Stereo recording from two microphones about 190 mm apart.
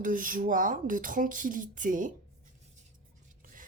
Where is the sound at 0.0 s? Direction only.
45° right (ahead or behind).